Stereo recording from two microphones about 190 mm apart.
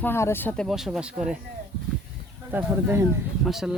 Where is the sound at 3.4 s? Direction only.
Centre (ahead or behind).